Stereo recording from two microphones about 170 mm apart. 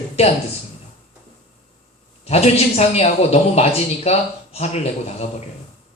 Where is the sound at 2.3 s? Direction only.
40° left (ahead or behind).